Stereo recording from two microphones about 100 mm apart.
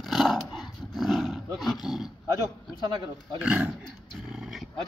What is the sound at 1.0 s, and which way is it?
Roar, centre (ahead or behind).